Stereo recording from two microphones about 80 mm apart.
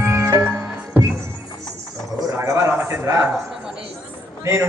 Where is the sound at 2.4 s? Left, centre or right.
Right.